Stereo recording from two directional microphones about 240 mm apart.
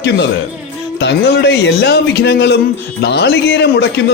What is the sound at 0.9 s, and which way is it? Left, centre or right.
A man's voice, left.